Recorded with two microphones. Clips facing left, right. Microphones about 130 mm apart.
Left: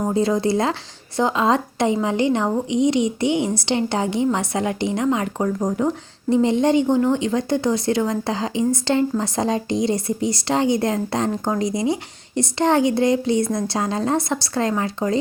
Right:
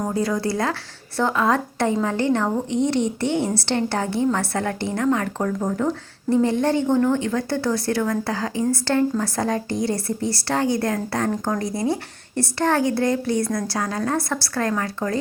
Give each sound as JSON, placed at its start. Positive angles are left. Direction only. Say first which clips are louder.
{"t": 0.1, "sound": "a woman's voice", "louder": "left 4 dB", "side_deg": 20}